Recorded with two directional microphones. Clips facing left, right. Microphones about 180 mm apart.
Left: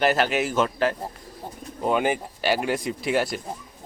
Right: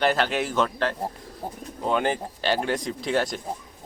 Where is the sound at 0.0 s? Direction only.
5° left (ahead or behind).